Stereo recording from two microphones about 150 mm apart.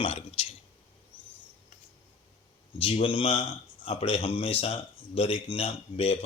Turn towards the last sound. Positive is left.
turn(degrees=40)  # may be behind; listen again after turning